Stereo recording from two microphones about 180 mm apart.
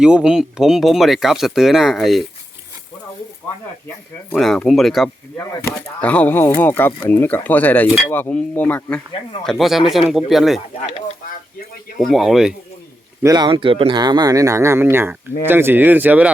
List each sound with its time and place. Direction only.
0.0 s speech: 5° right (ahead or behind)
4.3 s speech: centre (ahead or behind)
5.4 s speech: 10° left (ahead or behind)
11.9 s speech: centre (ahead or behind)
13.2 s speech: 20° right (ahead or behind)